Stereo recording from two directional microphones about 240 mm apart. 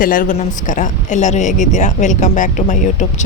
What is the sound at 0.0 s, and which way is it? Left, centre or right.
A woman's voice, left.